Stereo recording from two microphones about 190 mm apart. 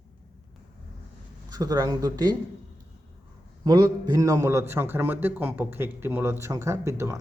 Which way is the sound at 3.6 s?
20° right (ahead or behind).